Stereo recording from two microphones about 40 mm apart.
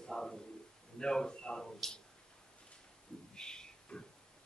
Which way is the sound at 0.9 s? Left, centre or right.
Centre.